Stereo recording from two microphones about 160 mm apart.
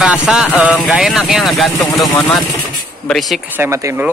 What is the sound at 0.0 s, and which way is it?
Speech, 5° right (ahead or behind).